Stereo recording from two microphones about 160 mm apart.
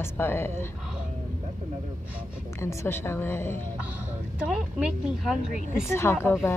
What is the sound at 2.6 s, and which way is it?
Speech, 15° left (ahead or behind).